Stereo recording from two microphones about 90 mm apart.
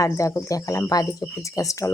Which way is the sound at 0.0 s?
35° left (ahead or behind).